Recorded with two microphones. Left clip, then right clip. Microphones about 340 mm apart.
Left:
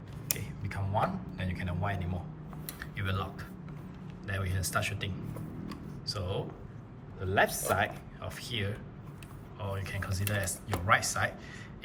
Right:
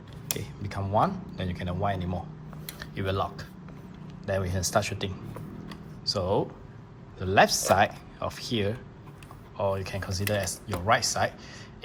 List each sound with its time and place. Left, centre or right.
0.3 s a sound: centre
2.6 s tick-tock: centre
4.3 s speech: centre